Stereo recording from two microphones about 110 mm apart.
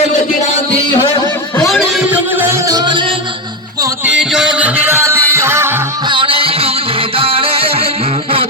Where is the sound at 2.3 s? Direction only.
20° right (ahead or behind); by 3.2 s 50° right (ahead or behind).